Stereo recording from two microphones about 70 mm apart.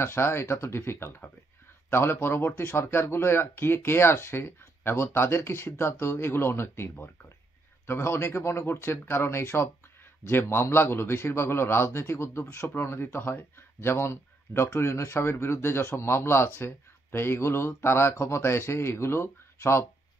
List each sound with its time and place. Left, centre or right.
0.0 s speech: left